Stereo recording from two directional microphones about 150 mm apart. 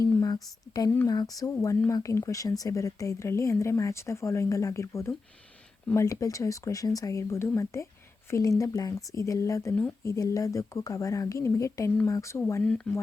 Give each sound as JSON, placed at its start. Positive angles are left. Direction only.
{"t": 0.0, "sound": "a sound", "side_deg": 20}
{"t": 0.9, "sound": "speech", "side_deg": 25}
{"t": 12.6, "sound": "speech", "side_deg": 5}